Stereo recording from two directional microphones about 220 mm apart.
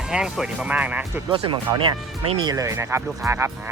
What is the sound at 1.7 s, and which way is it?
Speech, 15° right (ahead or behind).